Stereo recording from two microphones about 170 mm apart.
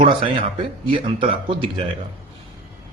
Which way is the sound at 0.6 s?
30° right (ahead or behind).